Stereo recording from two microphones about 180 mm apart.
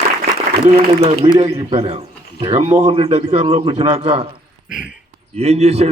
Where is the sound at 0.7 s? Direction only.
35° right (ahead or behind).